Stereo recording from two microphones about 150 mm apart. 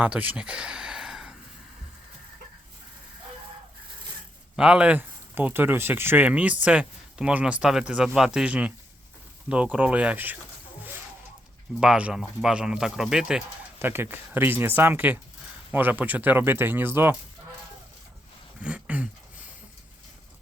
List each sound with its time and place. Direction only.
0.0 s speech: 10° right (ahead or behind)
4.5 s speech: 5° right (ahead or behind)
11.8 s speech: 5° right (ahead or behind)
13.7 s speech: 15° right (ahead or behind)
18.6 s speech: 10° right (ahead or behind)